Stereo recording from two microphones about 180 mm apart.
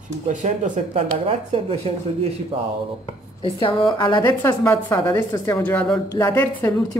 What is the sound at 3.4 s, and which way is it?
A woman's voice, 30° left (ahead or behind).